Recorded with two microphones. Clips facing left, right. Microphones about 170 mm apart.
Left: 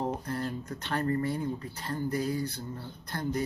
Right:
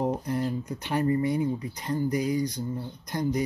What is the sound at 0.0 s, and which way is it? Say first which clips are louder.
Speech: right 5 dB; 15° right (ahead or behind).